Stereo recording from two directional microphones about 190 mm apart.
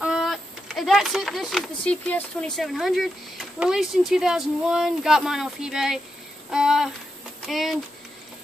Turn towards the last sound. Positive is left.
turn(degrees=0)  # may be behind; listen again after turning